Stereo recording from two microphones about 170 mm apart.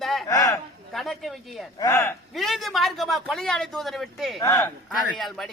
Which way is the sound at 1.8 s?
15° left (ahead or behind).